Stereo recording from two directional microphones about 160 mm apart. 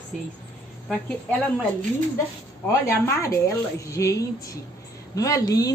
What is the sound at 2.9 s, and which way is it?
A woman's voice, 15° left (ahead or behind).